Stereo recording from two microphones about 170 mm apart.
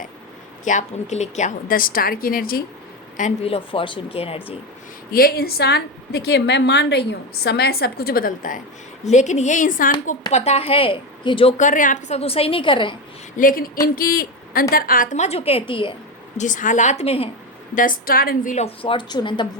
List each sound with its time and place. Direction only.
0.6 s a woman's voice: 45° left (ahead or behind)
3.2 s a woman's voice: 40° left (ahead or behind)
5.1 s a woman's voice: 60° left (ahead or behind)
10.3 s a woman's voice: 40° left (ahead or behind)
11.5 s a woman's voice: 50° left (ahead or behind); by 13.0 s 30° left (ahead or behind)
13.3 s a woman's voice: 55° left (ahead or behind); by 16.0 s 30° left (ahead or behind)
16.4 s a woman's voice: 50° left (ahead or behind)
17.7 s a woman's voice: 55° left (ahead or behind)
18.5 s speech: 35° left (ahead or behind)